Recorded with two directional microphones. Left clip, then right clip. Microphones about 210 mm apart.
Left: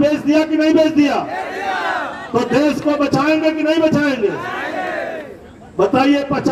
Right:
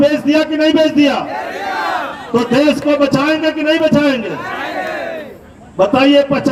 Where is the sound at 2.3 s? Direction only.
30° right (ahead or behind).